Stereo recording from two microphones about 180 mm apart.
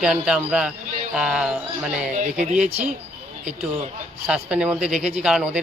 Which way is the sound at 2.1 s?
40° right (ahead or behind).